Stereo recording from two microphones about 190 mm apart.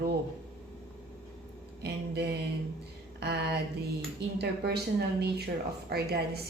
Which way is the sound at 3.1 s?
60° right (ahead or behind).